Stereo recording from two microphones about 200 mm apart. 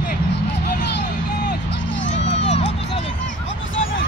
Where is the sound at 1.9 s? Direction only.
65° left (ahead or behind).